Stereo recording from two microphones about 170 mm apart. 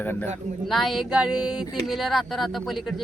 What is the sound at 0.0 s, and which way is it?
Speech, 10° left (ahead or behind).